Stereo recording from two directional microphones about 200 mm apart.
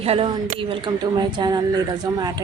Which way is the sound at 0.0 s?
30° right (ahead or behind).